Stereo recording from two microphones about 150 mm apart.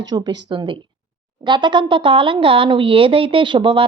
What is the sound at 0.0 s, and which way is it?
A woman's voice, 25° right (ahead or behind).